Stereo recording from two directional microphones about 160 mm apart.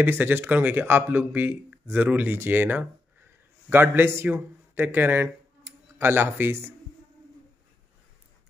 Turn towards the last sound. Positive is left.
turn(degrees=-15)  # may be behind; listen again after turning